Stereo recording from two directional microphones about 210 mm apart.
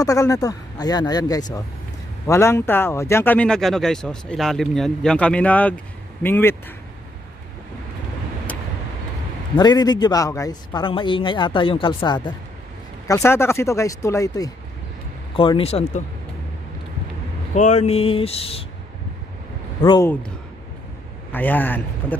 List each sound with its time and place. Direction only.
0.0 s speech: 15° left (ahead or behind)
8.5 s vehicle: 5° left (ahead or behind)
9.6 s a man's voice: 20° left (ahead or behind)
17.6 s a man's voice: 35° left (ahead or behind)
19.8 s speech: 15° left (ahead or behind)
21.3 s speech: 10° left (ahead or behind)